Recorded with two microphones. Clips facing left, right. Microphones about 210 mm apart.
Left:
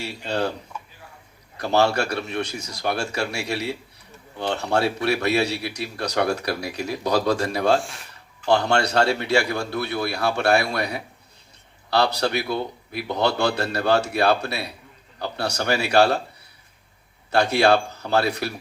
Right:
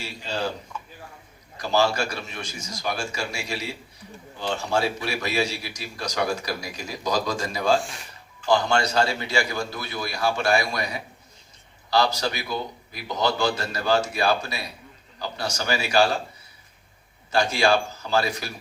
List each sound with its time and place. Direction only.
0.0 s speech: 60° left (ahead or behind)
1.5 s a man's voice: 60° left (ahead or behind)
7.8 s speech: centre (ahead or behind)
8.4 s a man's voice: 65° left (ahead or behind)
17.3 s a man's voice: 65° left (ahead or behind)